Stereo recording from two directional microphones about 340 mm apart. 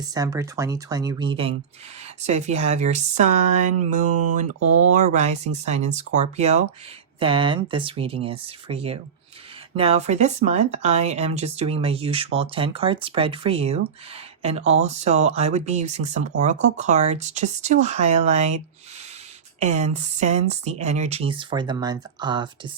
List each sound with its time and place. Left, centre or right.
0.1 s speech: centre